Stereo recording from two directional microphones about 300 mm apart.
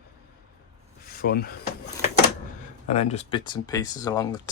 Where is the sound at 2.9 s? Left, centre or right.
Centre.